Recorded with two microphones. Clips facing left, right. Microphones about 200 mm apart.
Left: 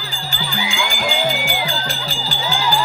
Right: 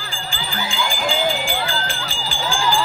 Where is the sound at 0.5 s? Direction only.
10° left (ahead or behind).